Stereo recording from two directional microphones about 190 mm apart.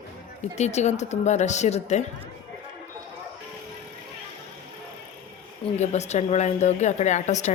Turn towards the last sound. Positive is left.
turn(degrees=40)  # may be behind; listen again after turning